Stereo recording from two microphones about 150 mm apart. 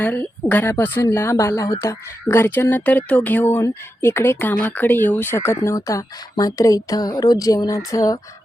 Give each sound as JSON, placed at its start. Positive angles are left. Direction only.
{"t": 0.0, "sound": "speech", "side_deg": 10}